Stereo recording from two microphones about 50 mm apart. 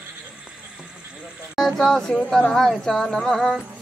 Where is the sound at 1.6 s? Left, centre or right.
Centre.